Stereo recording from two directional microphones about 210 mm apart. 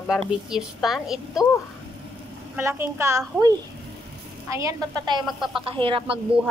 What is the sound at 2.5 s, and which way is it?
Speech, 10° right (ahead or behind).